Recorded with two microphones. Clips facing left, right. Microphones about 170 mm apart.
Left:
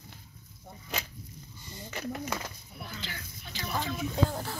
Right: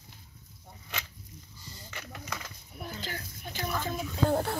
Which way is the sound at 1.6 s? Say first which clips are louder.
Left 5 dB; 20° left (ahead or behind).